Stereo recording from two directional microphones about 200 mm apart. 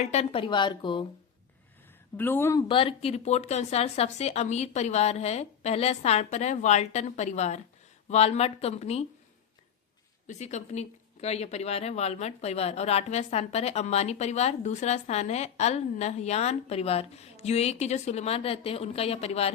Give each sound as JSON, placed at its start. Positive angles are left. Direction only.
{"t": 0.0, "sound": "a woman's voice", "side_deg": 35}
{"t": 2.1, "sound": "speech", "side_deg": 10}
{"t": 2.6, "sound": "speech", "side_deg": 25}
{"t": 10.2, "sound": "speech", "side_deg": 35}